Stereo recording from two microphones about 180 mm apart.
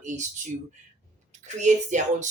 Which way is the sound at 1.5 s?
40° right (ahead or behind).